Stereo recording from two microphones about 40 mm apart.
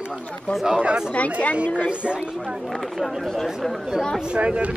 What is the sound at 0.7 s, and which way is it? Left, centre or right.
Speech, right.